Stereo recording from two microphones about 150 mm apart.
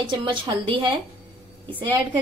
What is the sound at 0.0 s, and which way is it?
Speech, 30° right (ahead or behind).